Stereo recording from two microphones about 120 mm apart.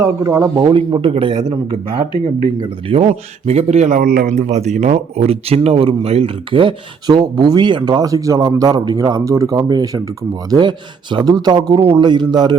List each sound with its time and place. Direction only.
0.0 s speech: 25° right (ahead or behind); by 1.4 s 45° right (ahead or behind)
2.6 s speech: 50° right (ahead or behind)